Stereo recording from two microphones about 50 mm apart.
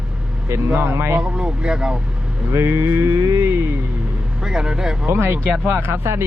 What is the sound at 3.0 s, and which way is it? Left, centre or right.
Music, right.